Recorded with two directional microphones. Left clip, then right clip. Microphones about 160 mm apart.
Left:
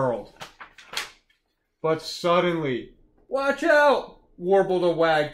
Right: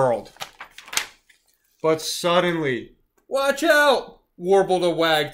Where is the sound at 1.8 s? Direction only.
20° right (ahead or behind).